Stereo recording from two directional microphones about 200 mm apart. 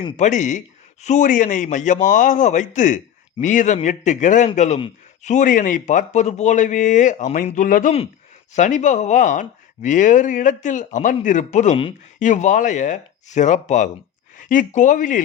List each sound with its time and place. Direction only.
0.2 s speech: 35° left (ahead or behind)